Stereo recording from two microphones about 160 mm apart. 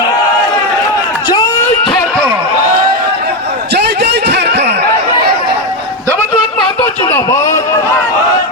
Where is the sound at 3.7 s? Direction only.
90° right.